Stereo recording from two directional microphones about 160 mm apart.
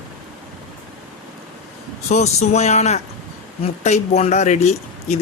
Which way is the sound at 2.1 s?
45° left (ahead or behind).